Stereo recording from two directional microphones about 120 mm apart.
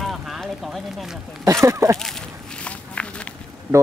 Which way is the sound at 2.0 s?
5° left (ahead or behind).